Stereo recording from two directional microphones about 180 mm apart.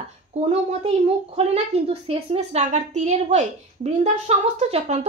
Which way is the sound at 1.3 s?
35° right (ahead or behind).